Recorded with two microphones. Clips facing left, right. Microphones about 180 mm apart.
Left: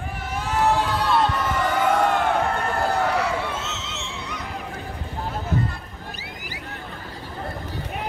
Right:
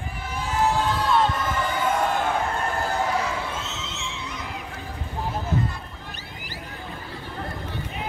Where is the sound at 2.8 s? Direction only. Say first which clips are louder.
Left 4 dB; 65° left (ahead or behind).